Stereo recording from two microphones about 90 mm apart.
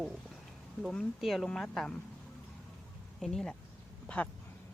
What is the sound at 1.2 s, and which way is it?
Speech, centre (ahead or behind).